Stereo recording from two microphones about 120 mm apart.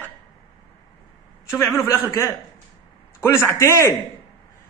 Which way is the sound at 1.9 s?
20° left (ahead or behind).